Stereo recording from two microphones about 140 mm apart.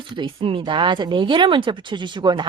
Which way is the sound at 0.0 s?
40° right (ahead or behind).